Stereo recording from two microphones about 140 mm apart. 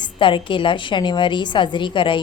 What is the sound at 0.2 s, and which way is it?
A woman's voice, 35° left (ahead or behind).